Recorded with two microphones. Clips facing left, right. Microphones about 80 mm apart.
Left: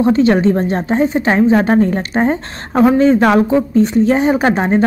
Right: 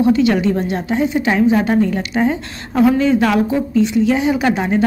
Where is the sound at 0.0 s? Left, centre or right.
Left.